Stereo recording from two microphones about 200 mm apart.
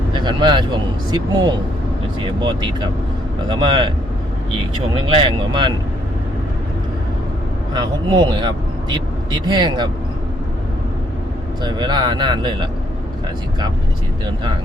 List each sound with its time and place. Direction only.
0.1 s speech: 25° right (ahead or behind)
5.0 s speech: 25° right (ahead or behind)
7.7 s speech: 20° right (ahead or behind)
11.6 s speech: 20° right (ahead or behind)